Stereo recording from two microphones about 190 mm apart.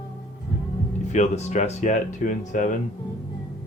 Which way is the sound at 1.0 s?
35° left (ahead or behind).